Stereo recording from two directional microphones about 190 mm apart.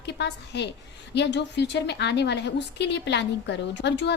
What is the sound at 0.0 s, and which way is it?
A woman's voice, 65° left (ahead or behind).